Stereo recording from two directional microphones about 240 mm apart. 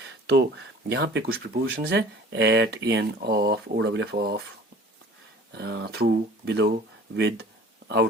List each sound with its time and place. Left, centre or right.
0.0 s speech: right
5.5 s speech: right